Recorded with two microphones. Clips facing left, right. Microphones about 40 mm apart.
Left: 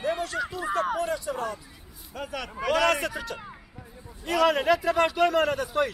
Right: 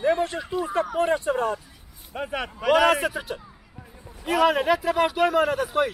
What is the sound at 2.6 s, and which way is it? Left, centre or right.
Speech, centre.